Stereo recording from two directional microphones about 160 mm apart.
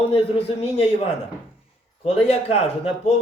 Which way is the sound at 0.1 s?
35° left (ahead or behind).